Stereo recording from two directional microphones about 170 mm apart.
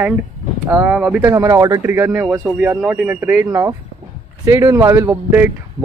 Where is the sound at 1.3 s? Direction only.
20° right (ahead or behind).